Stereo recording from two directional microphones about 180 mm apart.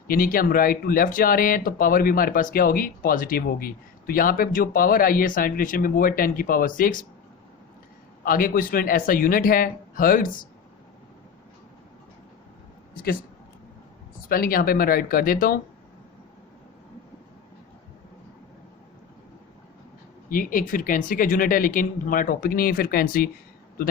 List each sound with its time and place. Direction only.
0.1 s speech: 50° left (ahead or behind)
8.2 s speech: 50° left (ahead or behind)
12.9 s speech: 50° left (ahead or behind)
14.3 s speech: 55° left (ahead or behind)
20.3 s speech: 50° left (ahead or behind)